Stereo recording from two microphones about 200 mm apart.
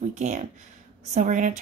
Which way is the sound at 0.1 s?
35° right (ahead or behind).